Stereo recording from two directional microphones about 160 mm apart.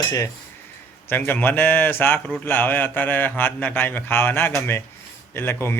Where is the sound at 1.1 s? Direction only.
10° left (ahead or behind).